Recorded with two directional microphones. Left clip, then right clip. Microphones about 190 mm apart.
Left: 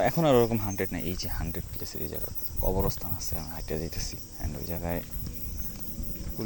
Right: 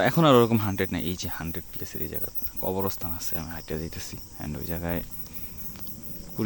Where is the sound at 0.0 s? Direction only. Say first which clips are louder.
Right 3 dB; 30° right (ahead or behind).